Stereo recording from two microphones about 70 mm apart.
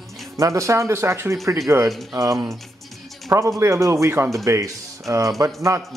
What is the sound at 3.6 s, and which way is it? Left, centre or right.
Speech, right.